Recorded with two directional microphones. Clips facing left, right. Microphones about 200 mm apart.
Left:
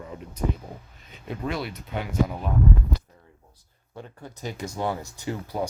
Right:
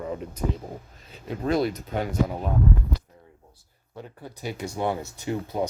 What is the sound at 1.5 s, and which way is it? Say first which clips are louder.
Speech: right 8 dB; 40° right (ahead or behind).